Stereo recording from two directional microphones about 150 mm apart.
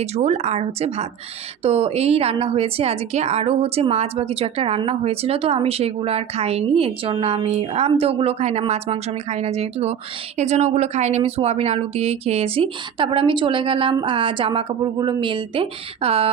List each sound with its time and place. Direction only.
0.0 s a woman's voice: 45° right (ahead or behind)